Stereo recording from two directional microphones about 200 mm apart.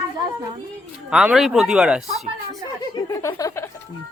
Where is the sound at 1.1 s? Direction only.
5° right (ahead or behind).